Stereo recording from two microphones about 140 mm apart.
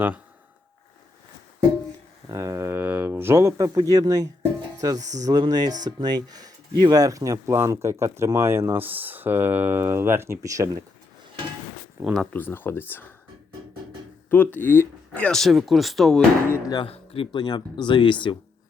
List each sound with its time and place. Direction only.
2.3 s speech: 25° right (ahead or behind)
12.0 s speech: centre (ahead or behind)
12.3 s speech: 15° left (ahead or behind)
14.3 s speech: 15° left (ahead or behind)
16.5 s speech: 25° left (ahead or behind)
16.8 s speech: 40° left (ahead or behind)